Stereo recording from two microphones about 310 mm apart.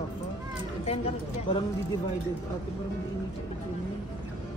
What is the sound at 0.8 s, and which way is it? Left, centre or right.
Speech, centre.